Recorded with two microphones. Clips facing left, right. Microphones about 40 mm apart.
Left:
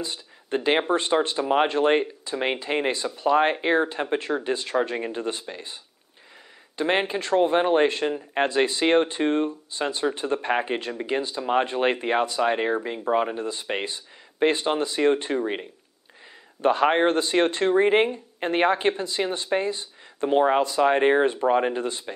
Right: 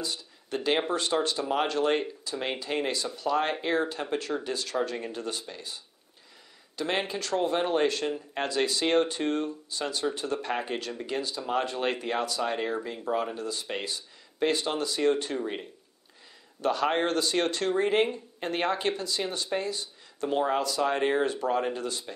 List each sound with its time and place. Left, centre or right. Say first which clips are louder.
0.0 s a sound: left 2 dB; left
0.7 s speech: left 5 dB; left
6.8 s speech: left 6 dB; left